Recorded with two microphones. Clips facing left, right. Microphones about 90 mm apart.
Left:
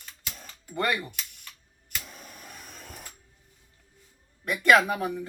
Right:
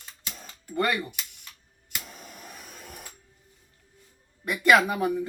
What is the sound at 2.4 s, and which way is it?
Vehicle, 5° right (ahead or behind).